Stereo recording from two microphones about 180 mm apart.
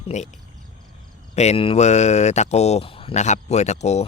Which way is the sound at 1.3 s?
35° left (ahead or behind).